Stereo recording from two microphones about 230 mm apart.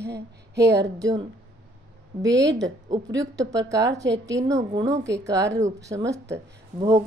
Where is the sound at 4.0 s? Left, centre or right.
Right.